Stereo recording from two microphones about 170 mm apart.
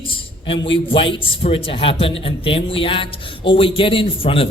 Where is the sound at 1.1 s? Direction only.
35° left (ahead or behind).